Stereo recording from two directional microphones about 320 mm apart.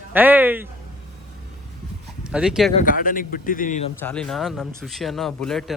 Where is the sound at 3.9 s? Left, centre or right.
Centre.